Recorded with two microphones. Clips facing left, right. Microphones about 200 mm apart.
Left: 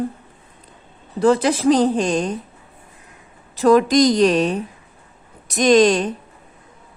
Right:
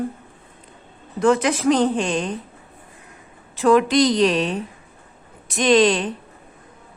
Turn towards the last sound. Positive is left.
turn(degrees=45)  # may be behind; listen again after turning